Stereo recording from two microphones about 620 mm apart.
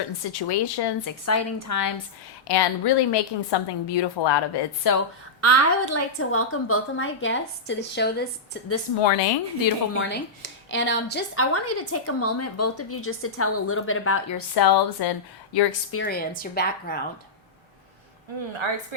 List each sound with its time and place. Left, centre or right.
0.3 s a woman's voice: left
1.2 s a woman's voice: left
2.5 s a woman's voice: left
5.4 s a woman's voice: left
9.0 s speech: left
9.9 s a woman's voice: centre
14.3 s a woman's voice: left
15.9 s a woman's voice: centre
18.5 s speech: right